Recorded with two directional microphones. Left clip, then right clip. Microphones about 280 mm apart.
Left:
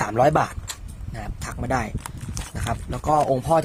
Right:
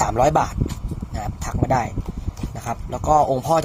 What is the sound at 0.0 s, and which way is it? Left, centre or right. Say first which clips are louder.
Speech: right 1 dB; centre.